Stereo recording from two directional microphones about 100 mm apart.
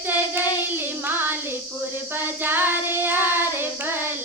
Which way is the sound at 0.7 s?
20° right (ahead or behind).